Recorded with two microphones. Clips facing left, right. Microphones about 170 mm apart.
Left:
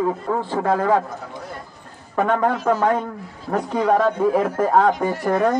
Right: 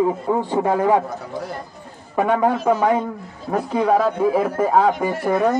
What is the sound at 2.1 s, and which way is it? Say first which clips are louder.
A man's voice: right 1 dB; 10° right (ahead or behind).